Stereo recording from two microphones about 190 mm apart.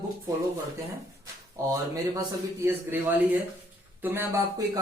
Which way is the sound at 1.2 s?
20° right (ahead or behind).